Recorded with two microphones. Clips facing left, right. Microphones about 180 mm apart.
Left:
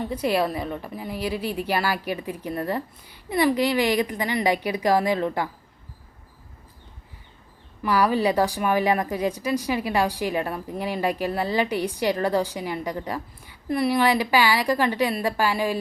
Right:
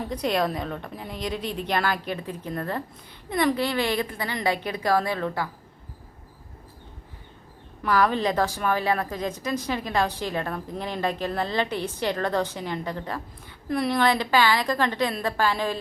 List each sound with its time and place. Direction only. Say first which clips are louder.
0.1 s a woman's voice: left 1 dB; 5° left (ahead or behind)
7.8 s a woman's voice: left 1 dB; 10° left (ahead or behind)